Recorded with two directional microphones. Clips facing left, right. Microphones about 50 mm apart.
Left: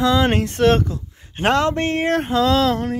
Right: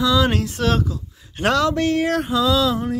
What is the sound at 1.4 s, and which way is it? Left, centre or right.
Speech, left.